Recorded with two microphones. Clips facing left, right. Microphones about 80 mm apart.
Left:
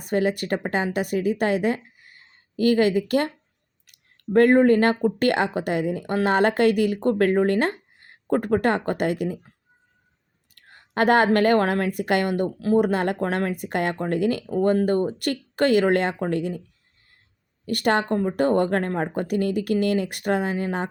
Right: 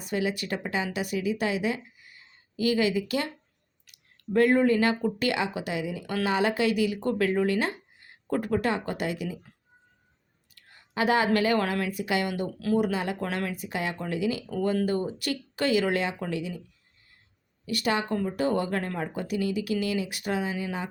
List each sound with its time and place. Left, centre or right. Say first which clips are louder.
0.0 s a woman's voice: left 6 dB; left
10.5 s a sound: left 5 dB; left
11.3 s speech: left 6 dB; left
12.5 s speech: left 5 dB; left
12.8 s speech: left 6 dB; left
17.7 s speech: left 6 dB; left